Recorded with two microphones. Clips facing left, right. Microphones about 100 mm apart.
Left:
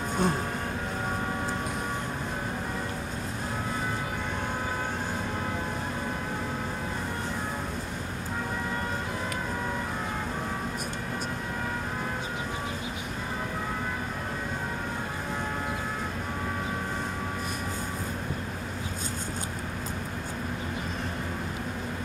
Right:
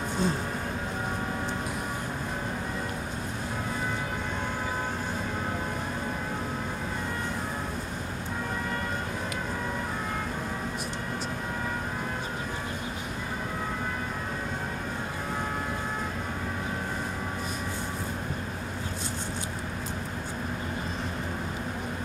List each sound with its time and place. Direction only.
0.2 s music: 55° left (ahead or behind)